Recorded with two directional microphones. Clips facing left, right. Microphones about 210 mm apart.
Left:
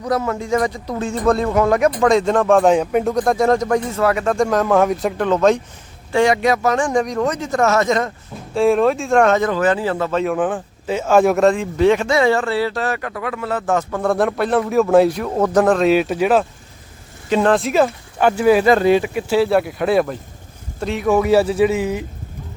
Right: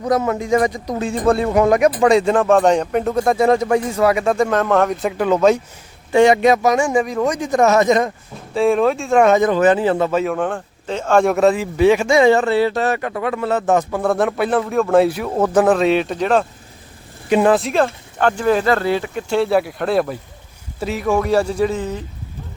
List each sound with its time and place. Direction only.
0.0 s speech: 20° right (ahead or behind)
6.1 s speech: 20° right (ahead or behind)
8.5 s speech: centre (ahead or behind); by 10.1 s 20° right (ahead or behind)
10.1 s speech: 5° right (ahead or behind); by 13.8 s 20° right (ahead or behind)
13.9 s speech: centre (ahead or behind)
17.2 s speech: 10° right (ahead or behind); by 22.0 s 10° left (ahead or behind)